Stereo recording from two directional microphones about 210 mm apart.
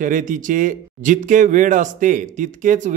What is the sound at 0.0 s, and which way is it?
Speech, 40° right (ahead or behind).